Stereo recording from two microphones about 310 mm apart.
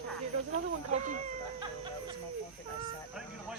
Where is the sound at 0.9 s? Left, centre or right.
Right.